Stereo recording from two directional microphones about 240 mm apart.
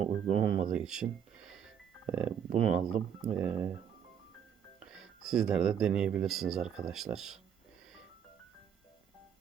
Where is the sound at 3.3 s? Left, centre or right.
Centre.